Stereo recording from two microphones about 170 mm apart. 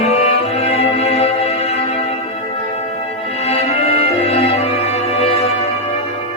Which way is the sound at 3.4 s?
35° left (ahead or behind).